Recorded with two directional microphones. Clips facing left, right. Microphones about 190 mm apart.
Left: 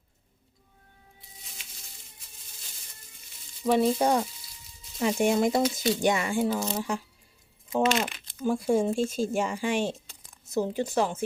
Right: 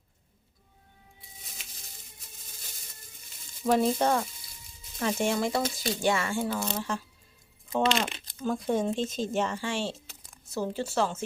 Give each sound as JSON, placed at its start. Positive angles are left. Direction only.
{"t": 3.7, "sound": "speech", "side_deg": 0}
{"t": 3.9, "sound": "speech", "side_deg": 10}